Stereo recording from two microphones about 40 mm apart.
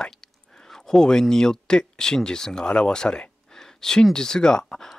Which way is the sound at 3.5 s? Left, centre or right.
Centre.